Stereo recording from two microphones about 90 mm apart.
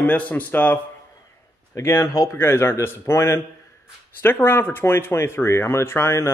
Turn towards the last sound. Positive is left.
turn(degrees=30)  # may be behind; listen again after turning